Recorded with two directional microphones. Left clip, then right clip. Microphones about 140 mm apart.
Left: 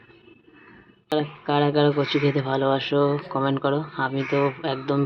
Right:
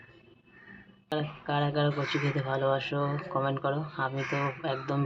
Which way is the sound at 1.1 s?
20° left (ahead or behind).